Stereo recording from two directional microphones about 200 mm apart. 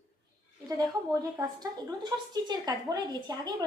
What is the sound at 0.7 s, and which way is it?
A woman's voice, 20° right (ahead or behind).